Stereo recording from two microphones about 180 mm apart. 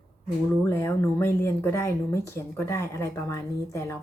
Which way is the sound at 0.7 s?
15° left (ahead or behind).